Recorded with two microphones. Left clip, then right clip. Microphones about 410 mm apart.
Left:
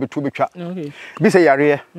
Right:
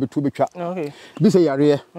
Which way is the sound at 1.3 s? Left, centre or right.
Left.